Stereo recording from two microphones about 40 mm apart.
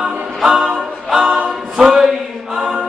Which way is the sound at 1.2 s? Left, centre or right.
Right.